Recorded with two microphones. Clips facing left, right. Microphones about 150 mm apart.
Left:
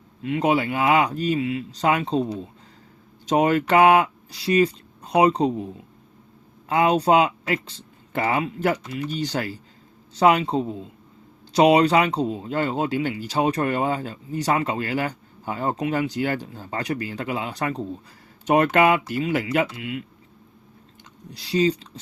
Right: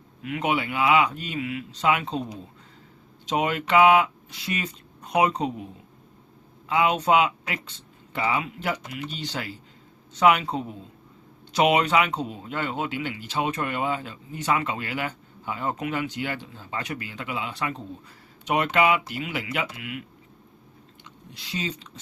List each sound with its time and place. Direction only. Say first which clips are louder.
0.2 s speech: left 5 dB; 30° left (ahead or behind)
3.2 s speech: left 6 dB; 45° left (ahead or behind)
6.7 s speech: left 3 dB; 40° left (ahead or behind)
8.1 s speech: left 3 dB; 50° left (ahead or behind); by 20.0 s 30° left (ahead or behind)
21.0 s speech: left 4 dB; 35° left (ahead or behind)